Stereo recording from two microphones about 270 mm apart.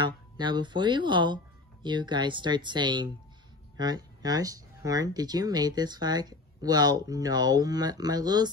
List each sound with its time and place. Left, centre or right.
0.0 s speech: centre